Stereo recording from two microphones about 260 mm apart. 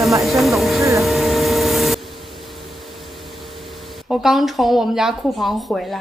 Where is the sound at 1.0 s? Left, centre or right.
Centre.